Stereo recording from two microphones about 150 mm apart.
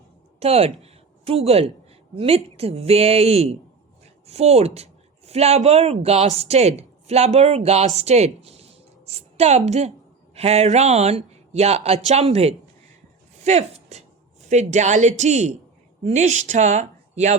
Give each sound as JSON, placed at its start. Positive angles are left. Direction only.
{"t": 0.3, "sound": "a woman's voice", "side_deg": -45}